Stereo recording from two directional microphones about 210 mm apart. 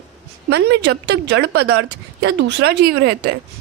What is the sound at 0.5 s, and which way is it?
A woman's voice, 55° right (ahead or behind).